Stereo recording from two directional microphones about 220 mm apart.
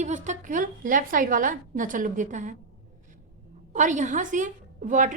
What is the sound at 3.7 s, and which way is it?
A woman's voice, 35° right (ahead or behind).